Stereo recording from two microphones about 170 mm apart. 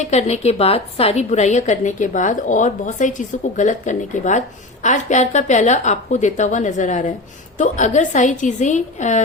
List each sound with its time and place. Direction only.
0.0 s a woman's voice: 40° left (ahead or behind)